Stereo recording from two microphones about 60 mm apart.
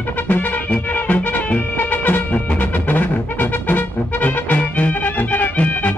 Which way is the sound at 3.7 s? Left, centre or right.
Left.